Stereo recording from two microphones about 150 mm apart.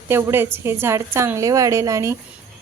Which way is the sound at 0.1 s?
15° right (ahead or behind).